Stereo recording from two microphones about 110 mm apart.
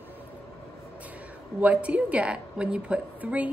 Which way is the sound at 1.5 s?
15° right (ahead or behind).